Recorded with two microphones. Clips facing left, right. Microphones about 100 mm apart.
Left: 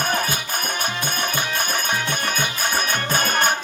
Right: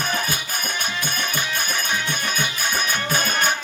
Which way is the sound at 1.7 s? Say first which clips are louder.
Left 2 dB; 50° left (ahead or behind).